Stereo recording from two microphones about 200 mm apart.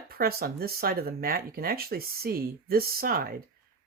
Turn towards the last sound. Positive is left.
turn(degrees=-50)  # may be behind; listen again after turning